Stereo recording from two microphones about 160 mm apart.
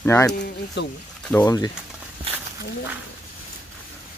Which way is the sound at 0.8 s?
90° left.